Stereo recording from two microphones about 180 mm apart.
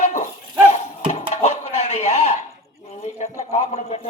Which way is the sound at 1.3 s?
40° left (ahead or behind).